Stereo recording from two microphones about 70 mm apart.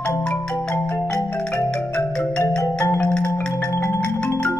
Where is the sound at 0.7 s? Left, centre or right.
Left.